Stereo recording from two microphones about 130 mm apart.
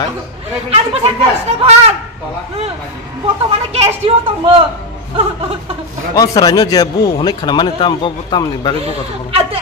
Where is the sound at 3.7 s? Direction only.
50° right (ahead or behind).